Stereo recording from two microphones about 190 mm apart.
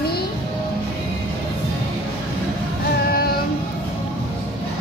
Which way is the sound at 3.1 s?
55° left (ahead or behind).